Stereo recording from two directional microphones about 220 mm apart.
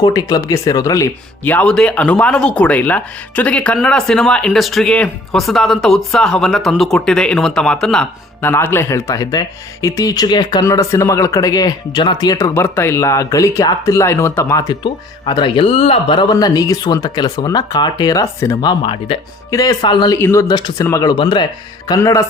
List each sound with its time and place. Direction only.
0.0 s speech: 15° left (ahead or behind)